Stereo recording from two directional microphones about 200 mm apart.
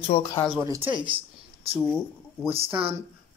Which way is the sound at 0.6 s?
15° right (ahead or behind).